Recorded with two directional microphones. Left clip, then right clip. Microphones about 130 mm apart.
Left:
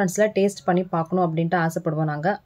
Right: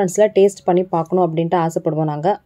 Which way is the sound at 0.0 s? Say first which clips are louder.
Right 7 dB; 30° right (ahead or behind).